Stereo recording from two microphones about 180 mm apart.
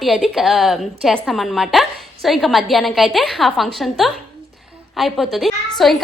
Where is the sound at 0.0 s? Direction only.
Centre (ahead or behind).